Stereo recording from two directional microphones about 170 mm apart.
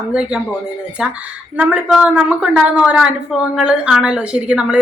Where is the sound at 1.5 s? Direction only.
5° right (ahead or behind).